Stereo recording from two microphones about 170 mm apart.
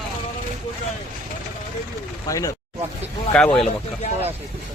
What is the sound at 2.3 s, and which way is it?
Speech, 20° left (ahead or behind).